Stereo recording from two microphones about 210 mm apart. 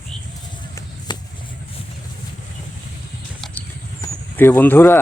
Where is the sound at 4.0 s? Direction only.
10° left (ahead or behind).